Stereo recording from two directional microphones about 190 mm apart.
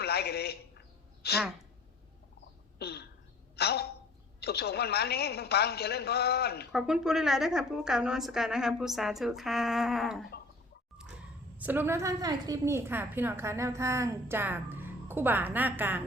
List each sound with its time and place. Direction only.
0.0 s a man's voice: 55° left (ahead or behind)
2.7 s a sound: 60° left (ahead or behind)
3.5 s a woman's voice: 55° left (ahead or behind)
6.7 s a woman's voice: 5° right (ahead or behind)
11.5 s a woman's voice: 10° right (ahead or behind)